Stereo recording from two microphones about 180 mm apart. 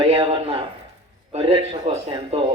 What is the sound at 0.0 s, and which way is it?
A child's voice, 30° right (ahead or behind).